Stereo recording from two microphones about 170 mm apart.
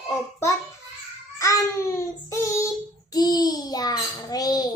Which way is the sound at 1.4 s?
20° left (ahead or behind).